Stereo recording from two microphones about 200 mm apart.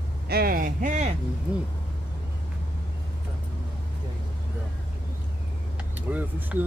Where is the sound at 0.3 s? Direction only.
50° right (ahead or behind).